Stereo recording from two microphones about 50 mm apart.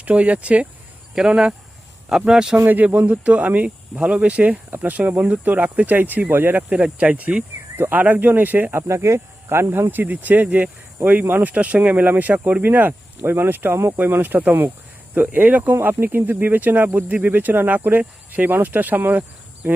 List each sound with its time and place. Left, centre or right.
0.0 s speech: right
2.6 s speech: right
3.1 s speech: right
6.7 s speech: right
8.7 s speech: right
9.9 s speech: right
15.7 s speech: right
16.0 s speech: right